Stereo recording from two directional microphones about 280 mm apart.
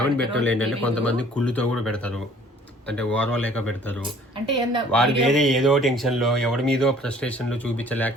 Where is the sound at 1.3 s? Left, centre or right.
Right.